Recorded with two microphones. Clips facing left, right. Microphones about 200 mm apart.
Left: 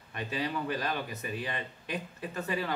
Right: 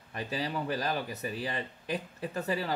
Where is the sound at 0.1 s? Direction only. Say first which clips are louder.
Even; 35° right (ahead or behind).